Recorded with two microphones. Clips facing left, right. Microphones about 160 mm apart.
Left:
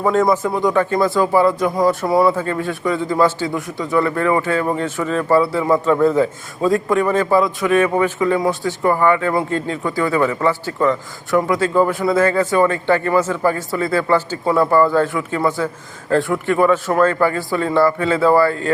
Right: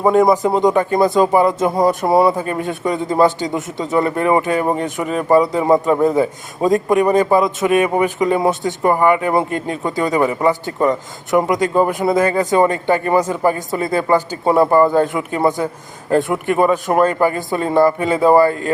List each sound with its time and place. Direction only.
0.0 s a man's voice: 15° right (ahead or behind)